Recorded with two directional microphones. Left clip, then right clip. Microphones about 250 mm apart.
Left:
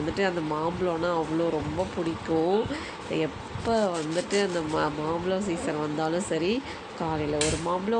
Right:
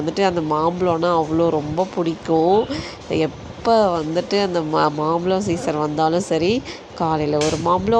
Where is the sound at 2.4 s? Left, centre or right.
Right.